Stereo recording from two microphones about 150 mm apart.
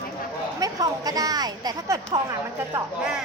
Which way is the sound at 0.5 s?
25° right (ahead or behind).